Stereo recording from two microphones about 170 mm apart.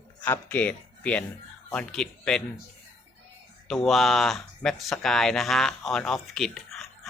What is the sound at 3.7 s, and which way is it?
Speech, centre (ahead or behind).